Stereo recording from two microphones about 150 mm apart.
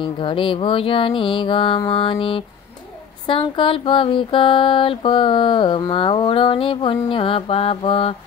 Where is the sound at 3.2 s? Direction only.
35° left (ahead or behind).